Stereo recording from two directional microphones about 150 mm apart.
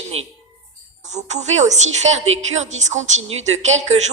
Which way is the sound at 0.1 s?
45° right (ahead or behind).